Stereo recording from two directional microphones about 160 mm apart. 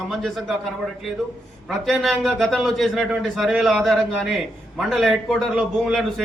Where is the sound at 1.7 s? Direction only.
Centre (ahead or behind).